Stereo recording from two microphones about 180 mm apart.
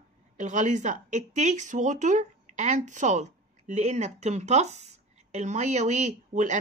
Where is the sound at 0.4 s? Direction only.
45° right (ahead or behind).